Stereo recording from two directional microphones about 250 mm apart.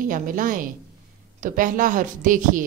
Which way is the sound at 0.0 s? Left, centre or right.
Right.